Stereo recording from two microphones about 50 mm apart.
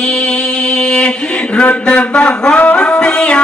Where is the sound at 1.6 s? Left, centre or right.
Left.